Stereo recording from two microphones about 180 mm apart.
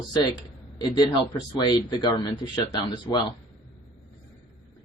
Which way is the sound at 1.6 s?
25° left (ahead or behind).